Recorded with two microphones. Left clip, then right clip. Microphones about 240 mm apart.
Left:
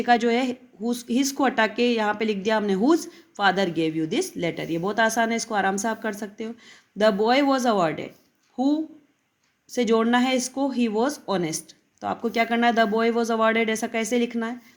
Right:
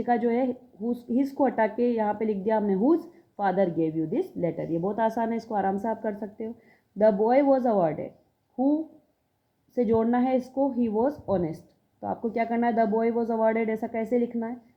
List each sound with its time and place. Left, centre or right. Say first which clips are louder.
0.0 s speech: left 4 dB; left
9.7 s speech: left 3 dB; left
10.9 s speech: left 1 dB; left
13.1 s speech: left 3 dB; left